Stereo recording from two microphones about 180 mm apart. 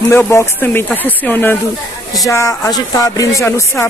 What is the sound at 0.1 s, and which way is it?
Speech, 15° left (ahead or behind).